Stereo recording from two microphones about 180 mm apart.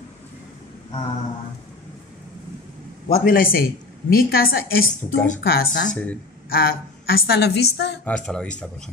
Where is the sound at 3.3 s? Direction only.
50° left (ahead or behind); by 8.0 s 70° left (ahead or behind).